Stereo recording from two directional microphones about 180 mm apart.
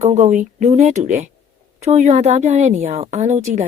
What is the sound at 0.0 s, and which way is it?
A woman's voice, 40° right (ahead or behind).